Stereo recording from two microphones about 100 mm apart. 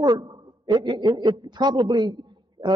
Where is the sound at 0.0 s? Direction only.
45° right (ahead or behind).